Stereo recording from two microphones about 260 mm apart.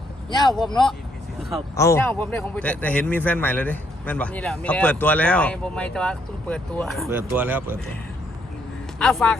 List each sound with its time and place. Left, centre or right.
0.3 s speech: centre
1.7 s speech: centre
9.0 s speech: centre